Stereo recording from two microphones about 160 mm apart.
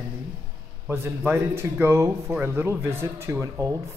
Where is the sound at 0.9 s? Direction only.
15° right (ahead or behind).